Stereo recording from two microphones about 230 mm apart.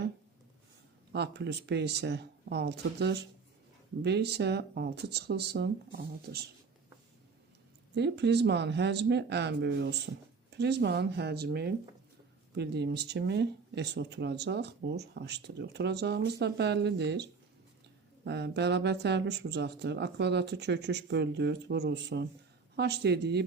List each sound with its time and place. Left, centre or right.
1.1 s speech: right
7.9 s speech: right
18.3 s speech: right